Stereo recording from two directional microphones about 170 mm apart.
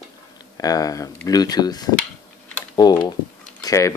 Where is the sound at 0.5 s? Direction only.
20° left (ahead or behind).